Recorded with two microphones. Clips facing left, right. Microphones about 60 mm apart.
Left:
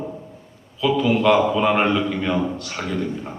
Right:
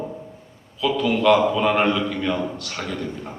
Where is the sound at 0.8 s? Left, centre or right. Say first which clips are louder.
Left 2 dB; left.